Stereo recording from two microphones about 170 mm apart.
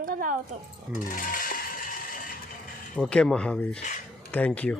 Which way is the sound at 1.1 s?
55° left (ahead or behind).